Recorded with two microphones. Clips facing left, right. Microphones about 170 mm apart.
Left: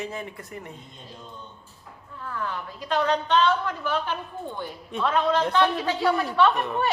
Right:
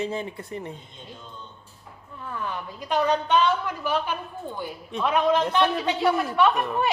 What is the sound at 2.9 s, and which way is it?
A woman's voice, 15° right (ahead or behind).